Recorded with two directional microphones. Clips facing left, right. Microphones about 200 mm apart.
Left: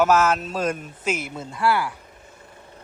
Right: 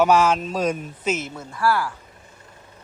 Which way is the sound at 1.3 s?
25° left (ahead or behind).